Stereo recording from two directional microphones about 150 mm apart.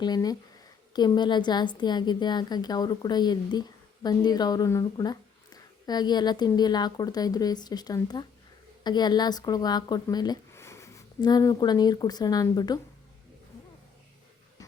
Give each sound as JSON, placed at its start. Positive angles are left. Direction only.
{"t": 0.0, "sound": "a woman's voice", "side_deg": 25}